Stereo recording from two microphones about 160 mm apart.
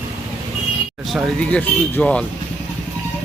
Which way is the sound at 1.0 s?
Centre (ahead or behind).